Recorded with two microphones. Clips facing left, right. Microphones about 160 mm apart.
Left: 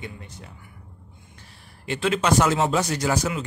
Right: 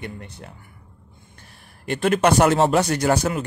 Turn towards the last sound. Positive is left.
turn(degrees=-55)  # may be behind; listen again after turning